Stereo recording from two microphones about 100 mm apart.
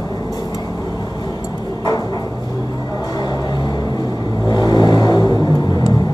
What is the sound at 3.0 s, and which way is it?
Vehicle, 40° left (ahead or behind).